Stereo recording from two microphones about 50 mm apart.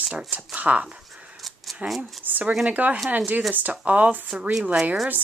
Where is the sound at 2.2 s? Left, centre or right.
Right.